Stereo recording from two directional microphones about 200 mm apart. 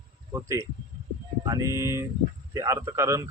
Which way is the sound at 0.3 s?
15° right (ahead or behind).